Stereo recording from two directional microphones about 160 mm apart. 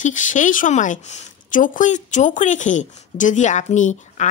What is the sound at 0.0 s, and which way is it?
Speech, 50° left (ahead or behind).